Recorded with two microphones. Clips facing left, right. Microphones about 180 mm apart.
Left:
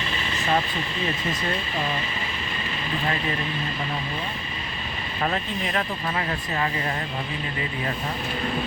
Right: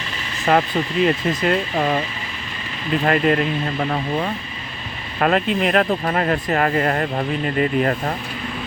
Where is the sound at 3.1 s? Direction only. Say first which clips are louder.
Right 12 dB; 70° right (ahead or behind).